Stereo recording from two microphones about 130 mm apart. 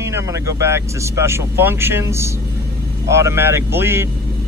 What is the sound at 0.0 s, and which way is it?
Speech, 20° right (ahead or behind).